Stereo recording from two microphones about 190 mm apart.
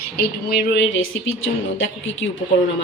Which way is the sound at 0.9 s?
90° left.